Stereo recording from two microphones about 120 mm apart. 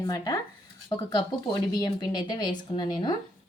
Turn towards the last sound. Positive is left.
turn(degrees=35)  # may be behind; listen again after turning